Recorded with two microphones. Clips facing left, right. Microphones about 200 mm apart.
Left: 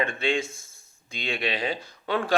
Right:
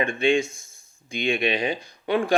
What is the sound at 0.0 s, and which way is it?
Speech, 15° right (ahead or behind).